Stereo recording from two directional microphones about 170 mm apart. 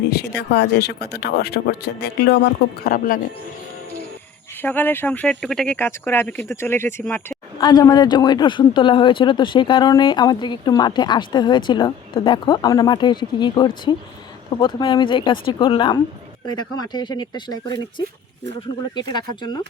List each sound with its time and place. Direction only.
0.0 s speech: 75° left (ahead or behind); by 3.2 s 55° left (ahead or behind)
4.6 s speech: 10° left (ahead or behind)
7.1 s a sound: 15° left (ahead or behind)
7.7 s speech: 25° left (ahead or behind)
18.9 s speech: 25° left (ahead or behind)